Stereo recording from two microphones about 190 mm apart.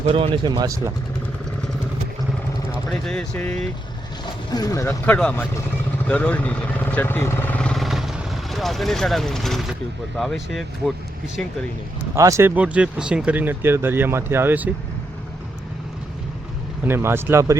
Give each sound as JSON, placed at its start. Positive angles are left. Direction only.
{"t": 0.0, "sound": "speech", "side_deg": -30}
{"t": 2.9, "sound": "speech", "side_deg": 5}
{"t": 4.5, "sound": "speech", "side_deg": 20}
{"t": 6.1, "sound": "vehicle", "side_deg": 5}
{"t": 10.2, "sound": "speech", "side_deg": 0}
{"t": 12.1, "sound": "speech", "side_deg": -15}
{"t": 16.8, "sound": "speech", "side_deg": -10}